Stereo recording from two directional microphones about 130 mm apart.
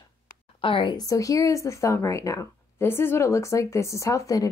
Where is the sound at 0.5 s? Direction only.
40° left (ahead or behind); by 4.4 s 25° left (ahead or behind).